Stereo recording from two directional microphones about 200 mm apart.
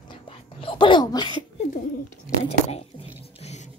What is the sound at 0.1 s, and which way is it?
Whispering, 25° left (ahead or behind).